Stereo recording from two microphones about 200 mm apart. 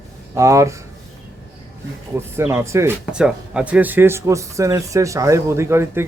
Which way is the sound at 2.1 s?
10° right (ahead or behind).